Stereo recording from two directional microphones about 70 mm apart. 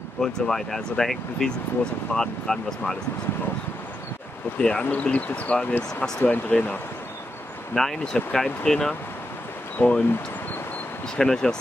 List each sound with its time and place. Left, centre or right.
0.2 s speech: centre
4.6 s speech: centre
7.7 s speech: centre
11.1 s speech: centre